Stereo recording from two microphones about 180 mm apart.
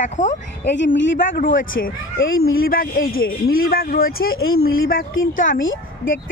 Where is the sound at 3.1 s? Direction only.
90° left.